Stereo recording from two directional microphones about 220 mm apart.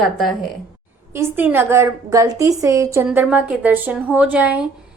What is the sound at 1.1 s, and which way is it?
A woman's voice, 10° right (ahead or behind).